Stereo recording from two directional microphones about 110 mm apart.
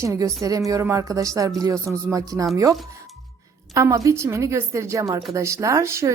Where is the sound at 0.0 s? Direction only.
30° right (ahead or behind).